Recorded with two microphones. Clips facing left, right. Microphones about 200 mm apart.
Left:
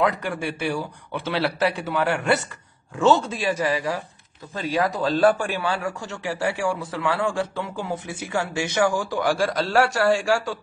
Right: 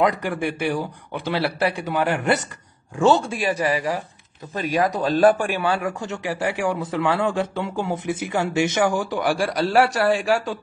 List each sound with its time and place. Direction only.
0.4 s a man's voice: 15° right (ahead or behind)